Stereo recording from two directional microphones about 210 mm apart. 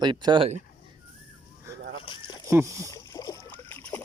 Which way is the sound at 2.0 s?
25° left (ahead or behind).